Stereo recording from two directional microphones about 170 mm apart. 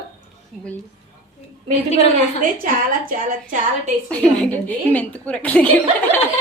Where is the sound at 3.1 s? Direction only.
55° right (ahead or behind).